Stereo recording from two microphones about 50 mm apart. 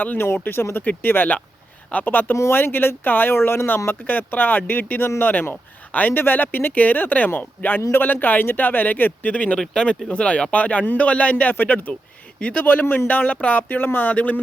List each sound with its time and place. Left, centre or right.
0.0 s speech: left
0.4 s speech: left
4.0 s speech: left
9.6 s speech: centre
11.5 s speech: left